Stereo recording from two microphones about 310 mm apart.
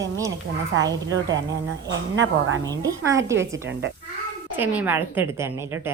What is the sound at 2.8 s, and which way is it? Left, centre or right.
Speech, centre.